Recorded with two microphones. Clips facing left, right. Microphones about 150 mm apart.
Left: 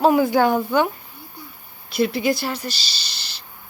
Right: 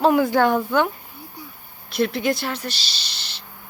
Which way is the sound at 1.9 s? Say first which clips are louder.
Left 1 dB; 5° left (ahead or behind).